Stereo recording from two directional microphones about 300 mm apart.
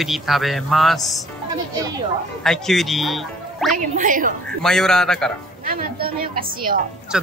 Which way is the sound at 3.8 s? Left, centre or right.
Right.